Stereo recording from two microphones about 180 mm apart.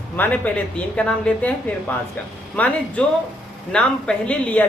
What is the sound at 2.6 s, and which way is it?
A woman's voice, 10° left (ahead or behind).